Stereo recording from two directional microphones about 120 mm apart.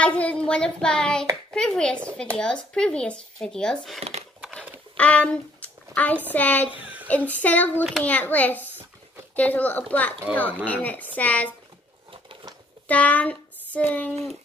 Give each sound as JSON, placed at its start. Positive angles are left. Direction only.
{"t": 0.0, "sound": "speech", "side_deg": 10}
{"t": 12.1, "sound": "a sound", "side_deg": -45}
{"t": 12.8, "sound": "child singing", "side_deg": 10}